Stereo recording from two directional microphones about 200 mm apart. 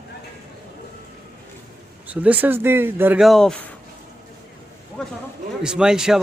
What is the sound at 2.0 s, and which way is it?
Speech, 5° right (ahead or behind).